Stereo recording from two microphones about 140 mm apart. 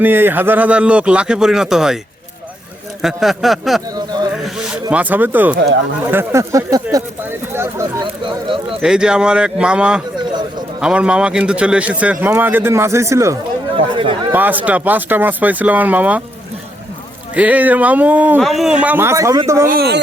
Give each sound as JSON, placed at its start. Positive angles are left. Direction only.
{"t": 0.0, "sound": "speech", "side_deg": -15}
{"t": 3.0, "sound": "a sound", "side_deg": 0}
{"t": 3.9, "sound": "a sound", "side_deg": -30}
{"t": 4.4, "sound": "speech", "side_deg": -5}
{"t": 8.2, "sound": "a sound", "side_deg": -35}
{"t": 8.8, "sound": "speech", "side_deg": -5}
{"t": 13.7, "sound": "speech", "side_deg": -40}
{"t": 14.3, "sound": "speech", "side_deg": -10}
{"t": 17.3, "sound": "speech", "side_deg": -10}
{"t": 18.3, "sound": "speech", "side_deg": 0}